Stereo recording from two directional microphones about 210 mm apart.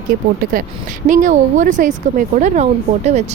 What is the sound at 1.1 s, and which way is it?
Speech, 35° right (ahead or behind).